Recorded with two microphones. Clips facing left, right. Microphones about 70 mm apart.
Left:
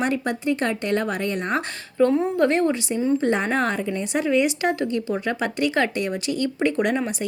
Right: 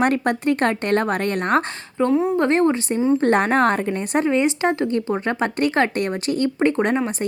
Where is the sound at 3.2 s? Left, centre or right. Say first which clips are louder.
Right 5 dB; right.